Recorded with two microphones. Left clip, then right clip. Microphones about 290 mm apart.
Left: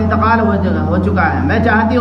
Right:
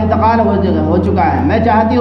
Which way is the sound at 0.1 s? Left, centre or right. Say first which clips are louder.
Right 2 dB; left.